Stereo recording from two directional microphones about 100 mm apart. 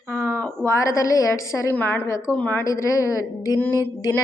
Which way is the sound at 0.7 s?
30° left (ahead or behind).